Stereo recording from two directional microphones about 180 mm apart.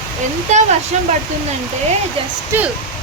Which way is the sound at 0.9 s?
40° right (ahead or behind).